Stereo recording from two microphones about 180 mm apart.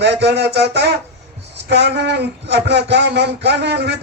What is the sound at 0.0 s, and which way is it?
A man's voice, 70° right (ahead or behind).